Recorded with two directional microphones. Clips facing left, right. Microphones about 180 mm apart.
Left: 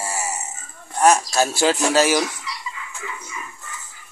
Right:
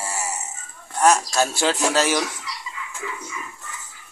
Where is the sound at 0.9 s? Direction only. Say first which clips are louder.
Left 2 dB; 10° left (ahead or behind).